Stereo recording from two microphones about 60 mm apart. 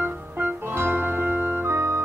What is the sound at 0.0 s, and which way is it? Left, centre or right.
Music, right.